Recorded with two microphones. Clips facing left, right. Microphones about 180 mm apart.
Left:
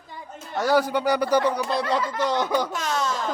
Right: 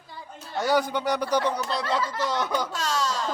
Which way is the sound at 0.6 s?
5° left (ahead or behind).